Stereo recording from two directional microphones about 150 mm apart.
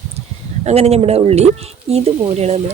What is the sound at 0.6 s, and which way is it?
Speech, 45° right (ahead or behind).